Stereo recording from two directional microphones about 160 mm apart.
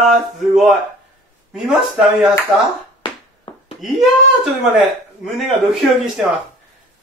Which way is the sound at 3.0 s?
30° left (ahead or behind).